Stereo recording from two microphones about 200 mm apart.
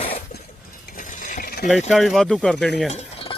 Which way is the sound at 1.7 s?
Centre (ahead or behind).